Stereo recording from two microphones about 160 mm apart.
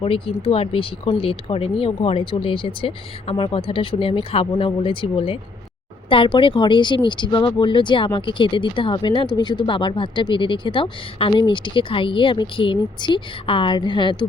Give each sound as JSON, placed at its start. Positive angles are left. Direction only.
{"t": 0.0, "sound": "speech", "side_deg": 35}